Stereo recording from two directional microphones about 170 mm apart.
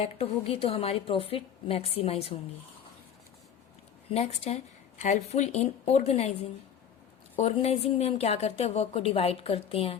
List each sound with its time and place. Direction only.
0.0 s a woman's voice: 35° left (ahead or behind)
4.1 s a woman's voice: 40° left (ahead or behind)